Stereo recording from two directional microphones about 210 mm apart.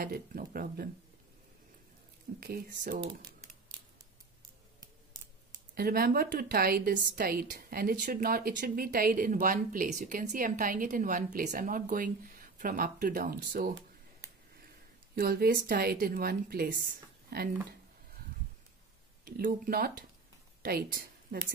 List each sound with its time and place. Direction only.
0.0 s speech: 45° right (ahead or behind)
2.4 s speech: 45° right (ahead or behind)
5.8 s a woman's voice: 45° right (ahead or behind)
15.1 s speech: 45° right (ahead or behind)
19.2 s a woman's voice: 40° right (ahead or behind)